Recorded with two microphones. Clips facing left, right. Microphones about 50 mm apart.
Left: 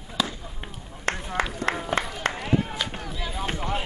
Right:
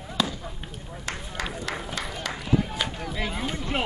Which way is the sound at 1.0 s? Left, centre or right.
Left.